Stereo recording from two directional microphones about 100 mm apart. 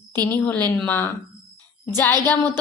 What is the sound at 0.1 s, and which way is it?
A woman's voice, 20° left (ahead or behind).